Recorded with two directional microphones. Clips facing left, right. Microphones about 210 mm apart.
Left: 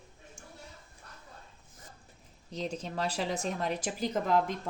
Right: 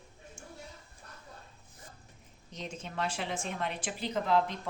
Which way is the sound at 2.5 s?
35° left (ahead or behind).